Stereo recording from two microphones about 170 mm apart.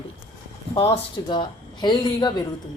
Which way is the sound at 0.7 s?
30° left (ahead or behind).